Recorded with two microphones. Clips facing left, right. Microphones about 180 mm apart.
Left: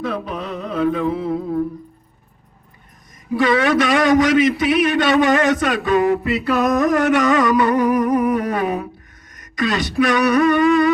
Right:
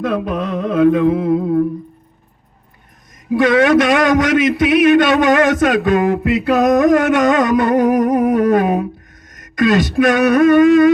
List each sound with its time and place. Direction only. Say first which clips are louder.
0.3 s a man's voice: right 7 dB; 50° right (ahead or behind)
3.3 s a man's voice: right 5 dB; 50° right (ahead or behind)